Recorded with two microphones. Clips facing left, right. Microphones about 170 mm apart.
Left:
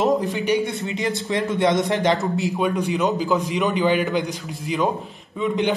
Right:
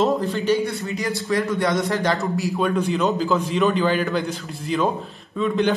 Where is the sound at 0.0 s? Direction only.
15° left (ahead or behind).